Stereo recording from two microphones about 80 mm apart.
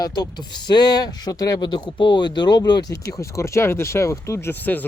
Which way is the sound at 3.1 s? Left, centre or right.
Left.